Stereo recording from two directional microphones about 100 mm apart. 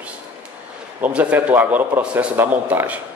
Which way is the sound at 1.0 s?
15° right (ahead or behind).